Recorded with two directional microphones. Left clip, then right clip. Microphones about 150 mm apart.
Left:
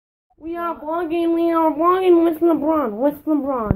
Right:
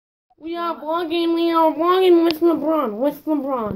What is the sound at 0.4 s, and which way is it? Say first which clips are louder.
Speech: even; 5° right (ahead or behind).